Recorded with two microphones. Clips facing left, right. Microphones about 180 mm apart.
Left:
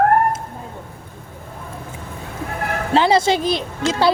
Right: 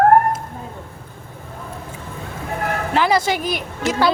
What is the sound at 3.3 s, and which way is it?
Speech, 15° right (ahead or behind).